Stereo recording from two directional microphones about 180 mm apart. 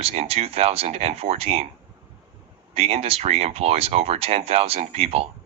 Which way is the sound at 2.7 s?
35° right (ahead or behind).